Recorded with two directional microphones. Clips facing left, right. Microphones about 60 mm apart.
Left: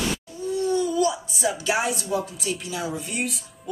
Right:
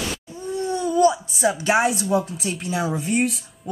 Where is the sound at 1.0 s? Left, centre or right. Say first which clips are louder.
Right 5 dB; right.